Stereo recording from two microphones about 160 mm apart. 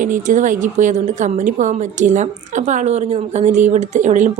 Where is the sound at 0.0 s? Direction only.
55° right (ahead or behind).